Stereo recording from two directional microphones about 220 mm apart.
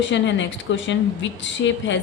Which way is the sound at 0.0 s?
55° left (ahead or behind).